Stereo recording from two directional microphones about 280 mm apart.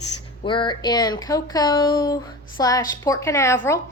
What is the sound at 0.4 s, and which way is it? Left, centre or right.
A woman's voice, centre.